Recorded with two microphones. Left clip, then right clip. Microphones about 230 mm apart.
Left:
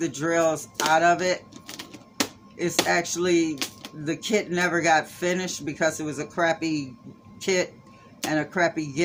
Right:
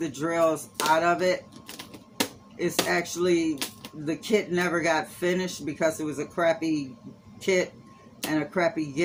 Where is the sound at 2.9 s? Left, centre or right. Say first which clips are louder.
Left 2 dB; left.